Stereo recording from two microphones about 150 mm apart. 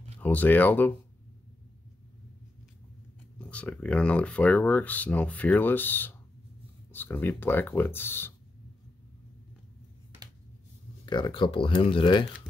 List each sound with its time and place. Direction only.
0.2 s speech: 10° left (ahead or behind)
3.3 s speech: 10° left (ahead or behind)
11.1 s speech: 30° left (ahead or behind)